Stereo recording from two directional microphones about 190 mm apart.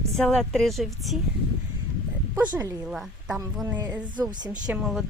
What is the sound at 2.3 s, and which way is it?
Speech, 15° right (ahead or behind).